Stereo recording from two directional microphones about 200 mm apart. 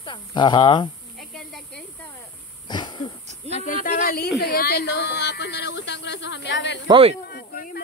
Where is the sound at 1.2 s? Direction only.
Centre (ahead or behind).